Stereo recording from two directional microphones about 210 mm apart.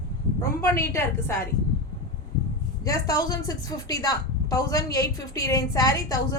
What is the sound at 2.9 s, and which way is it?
A woman's voice, 15° left (ahead or behind).